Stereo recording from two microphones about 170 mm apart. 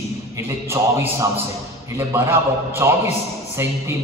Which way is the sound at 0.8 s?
15° right (ahead or behind).